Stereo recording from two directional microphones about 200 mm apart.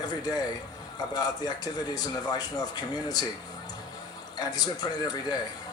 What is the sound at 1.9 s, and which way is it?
Speech, 20° left (ahead or behind).